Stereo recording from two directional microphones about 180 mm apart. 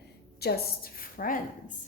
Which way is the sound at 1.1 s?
50° left (ahead or behind).